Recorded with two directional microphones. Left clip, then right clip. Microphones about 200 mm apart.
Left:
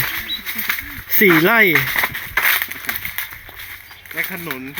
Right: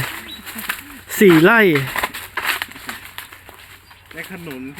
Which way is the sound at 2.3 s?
30° left (ahead or behind).